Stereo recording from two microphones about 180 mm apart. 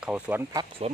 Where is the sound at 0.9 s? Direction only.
35° right (ahead or behind).